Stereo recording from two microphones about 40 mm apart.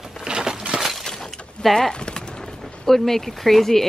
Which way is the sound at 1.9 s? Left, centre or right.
Left.